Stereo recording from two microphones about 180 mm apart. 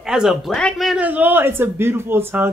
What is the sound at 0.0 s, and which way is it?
Speech, 5° right (ahead or behind).